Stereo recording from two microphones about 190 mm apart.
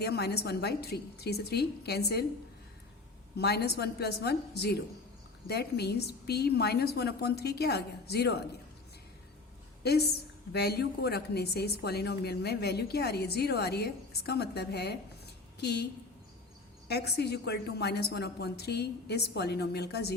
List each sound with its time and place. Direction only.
0.0 s a woman's voice: 55° left (ahead or behind)
3.3 s a woman's voice: 60° left (ahead or behind)
9.8 s a woman's voice: 55° left (ahead or behind)
16.9 s a woman's voice: 60° left (ahead or behind)